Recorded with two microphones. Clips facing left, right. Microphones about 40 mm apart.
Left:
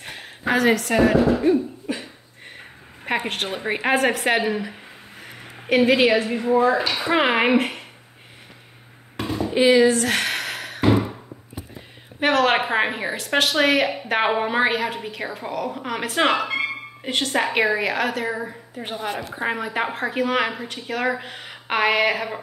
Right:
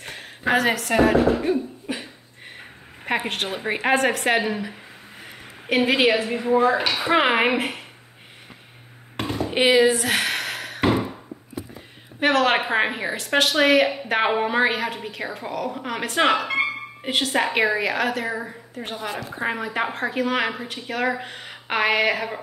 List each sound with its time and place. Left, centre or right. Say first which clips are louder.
0.6 s a woman's voice: left 2 dB; centre
1.4 s cough: left 4 dB; centre
3.1 s a woman's voice: even; centre
5.2 s a sound: left 2 dB; centre
6.4 s speech: right 1 dB; centre
6.9 s a woman's voice: even; centre
9.3 s a sound: left 2 dB; right
9.7 s a sound: left 1 dB; centre
12.2 s a woman's voice: left 1 dB; centre
18.9 s a woman's voice: left 3 dB; left
19.3 s a woman's voice: even; centre